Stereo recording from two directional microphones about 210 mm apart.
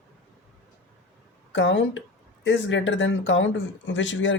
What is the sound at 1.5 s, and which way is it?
Speech, 60° left (ahead or behind).